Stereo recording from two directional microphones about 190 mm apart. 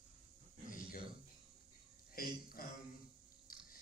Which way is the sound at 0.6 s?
45° left (ahead or behind).